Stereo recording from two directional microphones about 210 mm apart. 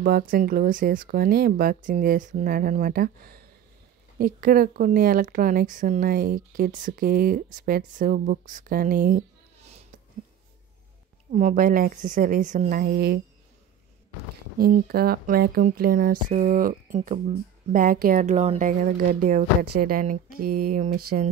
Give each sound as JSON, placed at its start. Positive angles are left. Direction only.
{"t": 0.0, "sound": "a woman's voice", "side_deg": -45}
{"t": 11.3, "sound": "a woman's voice", "side_deg": -40}
{"t": 14.6, "sound": "a woman's voice", "side_deg": -45}
{"t": 20.2, "sound": "a sound", "side_deg": -90}
{"t": 20.7, "sound": "a woman's voice", "side_deg": -40}